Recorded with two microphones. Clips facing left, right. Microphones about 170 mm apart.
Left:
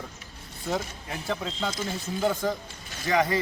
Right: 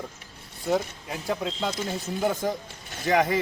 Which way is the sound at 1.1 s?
5° right (ahead or behind).